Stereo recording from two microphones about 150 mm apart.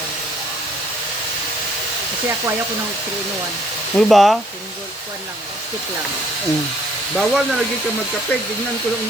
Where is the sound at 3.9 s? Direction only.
Centre (ahead or behind).